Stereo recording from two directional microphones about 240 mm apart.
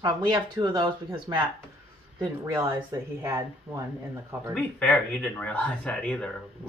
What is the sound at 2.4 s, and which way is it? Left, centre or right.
Speech, centre.